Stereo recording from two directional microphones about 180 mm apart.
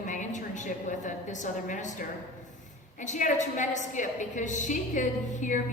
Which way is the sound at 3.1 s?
45° left (ahead or behind).